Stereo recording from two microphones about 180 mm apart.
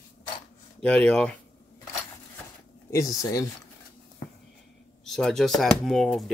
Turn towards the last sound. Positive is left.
turn(degrees=0)  # may be behind; listen again after turning